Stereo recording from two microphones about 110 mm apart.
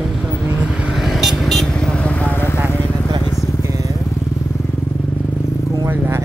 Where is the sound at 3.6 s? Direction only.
30° right (ahead or behind).